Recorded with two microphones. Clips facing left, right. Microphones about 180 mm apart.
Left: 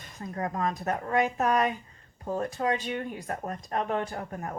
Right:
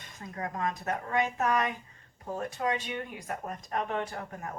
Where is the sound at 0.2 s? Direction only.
35° left (ahead or behind).